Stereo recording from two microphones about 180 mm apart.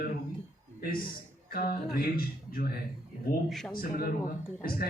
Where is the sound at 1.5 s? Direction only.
55° left (ahead or behind).